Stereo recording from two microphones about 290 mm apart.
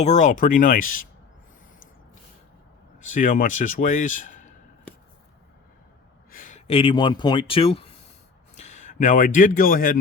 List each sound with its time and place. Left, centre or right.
0.0 s a man's voice: left
3.1 s a man's voice: left
6.3 s speech: left